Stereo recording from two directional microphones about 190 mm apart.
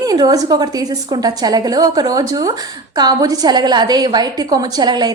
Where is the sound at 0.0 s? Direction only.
20° right (ahead or behind).